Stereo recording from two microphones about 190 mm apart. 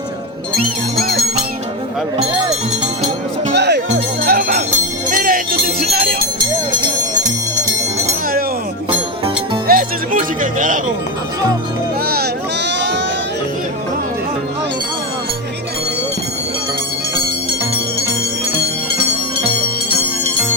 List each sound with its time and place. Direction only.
2.2 s speech: 25° right (ahead or behind)
3.5 s music: 65° right (ahead or behind)
5.1 s jingle bell: 50° right (ahead or behind)
9.6 s music: 45° right (ahead or behind)
12.0 s vehicle: 55° right (ahead or behind)